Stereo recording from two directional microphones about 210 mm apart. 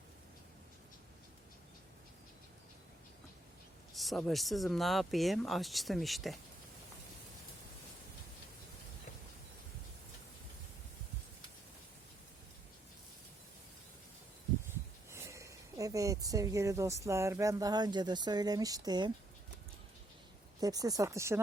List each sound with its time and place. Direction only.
3.9 s speech: centre (ahead or behind)
15.1 s speech: 15° right (ahead or behind)
20.6 s speech: 15° right (ahead or behind)